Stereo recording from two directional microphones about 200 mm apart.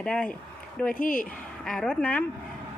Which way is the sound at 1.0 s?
45° left (ahead or behind).